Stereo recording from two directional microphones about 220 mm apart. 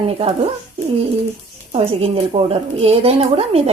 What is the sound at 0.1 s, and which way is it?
Speech, 25° right (ahead or behind).